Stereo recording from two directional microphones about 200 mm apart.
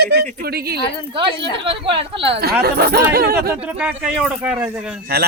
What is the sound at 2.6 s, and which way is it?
Speech, 50° right (ahead or behind).